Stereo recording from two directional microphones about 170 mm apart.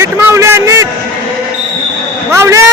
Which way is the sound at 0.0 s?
15° right (ahead or behind).